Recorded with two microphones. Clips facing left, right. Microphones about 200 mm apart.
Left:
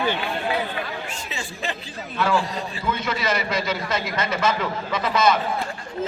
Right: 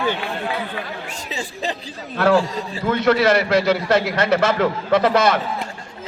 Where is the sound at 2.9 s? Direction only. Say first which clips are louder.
Right 10 dB; 70° right (ahead or behind).